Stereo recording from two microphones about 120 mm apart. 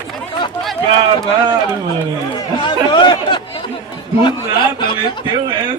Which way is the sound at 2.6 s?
40° left (ahead or behind).